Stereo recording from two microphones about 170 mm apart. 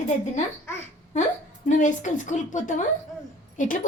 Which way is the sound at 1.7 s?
45° left (ahead or behind).